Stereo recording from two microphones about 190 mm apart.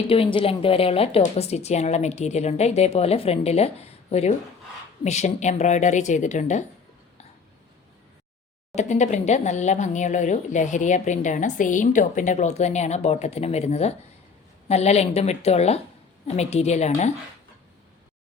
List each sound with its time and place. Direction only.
0.1 s speech: 30° left (ahead or behind)
8.7 s speech: 35° left (ahead or behind)